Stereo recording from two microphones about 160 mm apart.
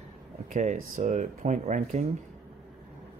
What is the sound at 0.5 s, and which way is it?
Speech, 50° right (ahead or behind).